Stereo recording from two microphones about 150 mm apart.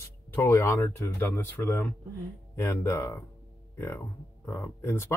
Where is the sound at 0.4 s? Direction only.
20° left (ahead or behind).